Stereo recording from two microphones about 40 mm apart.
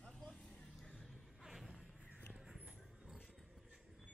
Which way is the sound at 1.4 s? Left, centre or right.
Centre.